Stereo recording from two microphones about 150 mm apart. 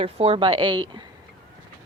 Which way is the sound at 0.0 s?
40° right (ahead or behind).